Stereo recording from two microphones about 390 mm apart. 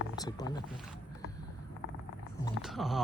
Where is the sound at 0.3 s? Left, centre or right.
Centre.